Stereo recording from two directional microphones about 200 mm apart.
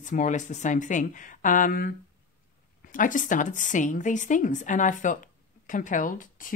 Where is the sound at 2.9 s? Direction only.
40° left (ahead or behind).